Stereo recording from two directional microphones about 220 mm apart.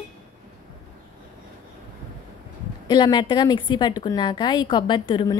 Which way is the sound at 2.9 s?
20° left (ahead or behind).